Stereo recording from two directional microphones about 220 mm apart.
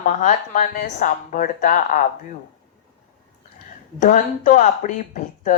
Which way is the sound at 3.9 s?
35° left (ahead or behind).